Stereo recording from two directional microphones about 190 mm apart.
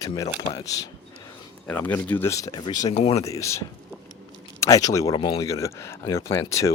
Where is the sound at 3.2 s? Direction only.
15° left (ahead or behind).